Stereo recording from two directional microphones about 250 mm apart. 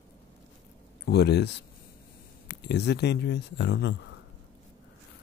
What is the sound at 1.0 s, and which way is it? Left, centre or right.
Speech, left.